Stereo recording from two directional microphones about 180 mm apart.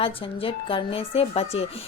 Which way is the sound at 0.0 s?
30° left (ahead or behind).